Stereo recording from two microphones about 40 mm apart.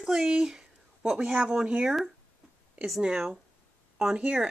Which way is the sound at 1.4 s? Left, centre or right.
Right.